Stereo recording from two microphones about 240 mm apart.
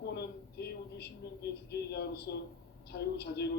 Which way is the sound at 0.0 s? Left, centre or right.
Left.